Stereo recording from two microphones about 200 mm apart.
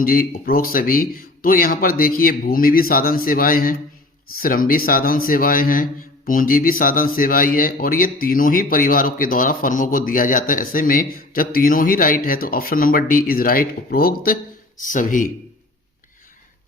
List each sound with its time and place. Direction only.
0.0 s a man's voice: 45° left (ahead or behind)